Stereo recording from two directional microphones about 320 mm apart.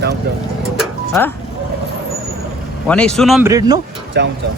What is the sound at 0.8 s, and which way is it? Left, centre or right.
Music, centre.